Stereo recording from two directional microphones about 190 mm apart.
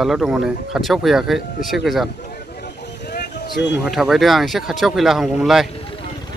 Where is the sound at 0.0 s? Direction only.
Centre (ahead or behind).